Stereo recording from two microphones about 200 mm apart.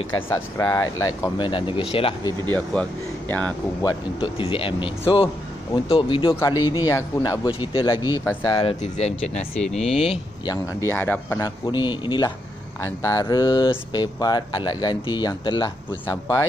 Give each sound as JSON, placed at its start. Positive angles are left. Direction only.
{"t": 0.3, "sound": "speech", "side_deg": 15}
{"t": 2.5, "sound": "speech", "side_deg": 5}
{"t": 3.8, "sound": "speech", "side_deg": 25}
{"t": 9.6, "sound": "speech", "side_deg": 0}
{"t": 9.8, "sound": "speech", "side_deg": 30}